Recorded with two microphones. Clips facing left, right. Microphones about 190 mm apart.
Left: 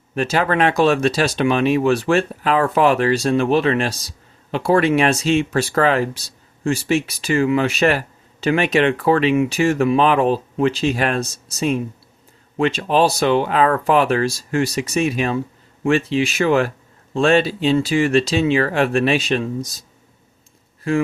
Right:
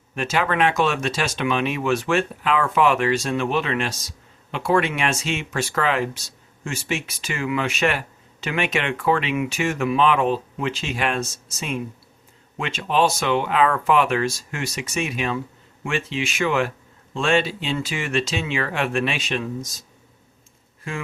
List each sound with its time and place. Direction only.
0.2 s speech: 35° left (ahead or behind)
20.9 s speech: 35° left (ahead or behind)